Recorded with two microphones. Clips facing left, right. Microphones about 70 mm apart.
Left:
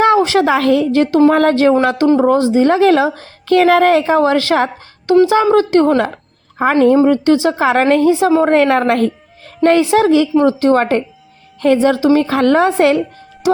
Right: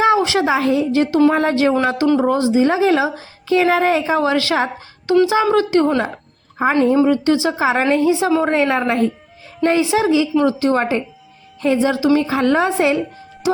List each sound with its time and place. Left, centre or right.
0.0 s a sound: left
0.4 s a woman's voice: left
6.6 s a woman's voice: left
6.9 s a woman's voice: left
8.3 s a woman's voice: left
8.5 s a woman's voice: left
8.9 s a woman's voice: left
9.6 s a woman's voice: left